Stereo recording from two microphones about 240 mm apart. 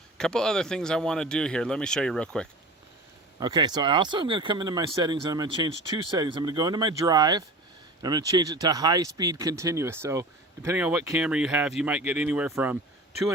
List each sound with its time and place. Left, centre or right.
0.2 s speech: centre
3.4 s speech: centre